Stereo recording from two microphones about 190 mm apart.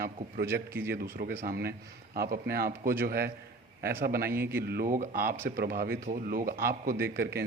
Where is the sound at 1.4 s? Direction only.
55° right (ahead or behind).